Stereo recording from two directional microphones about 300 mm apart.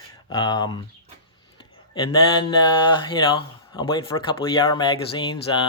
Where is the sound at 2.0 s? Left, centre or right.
Centre.